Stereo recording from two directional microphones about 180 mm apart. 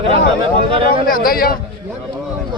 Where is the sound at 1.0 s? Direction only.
55° left (ahead or behind).